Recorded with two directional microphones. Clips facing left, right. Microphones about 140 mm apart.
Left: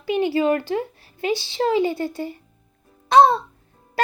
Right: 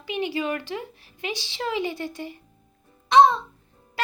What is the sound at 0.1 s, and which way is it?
Speech, 40° left (ahead or behind).